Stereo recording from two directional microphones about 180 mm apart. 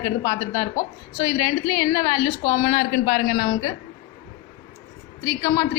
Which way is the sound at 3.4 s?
25° left (ahead or behind).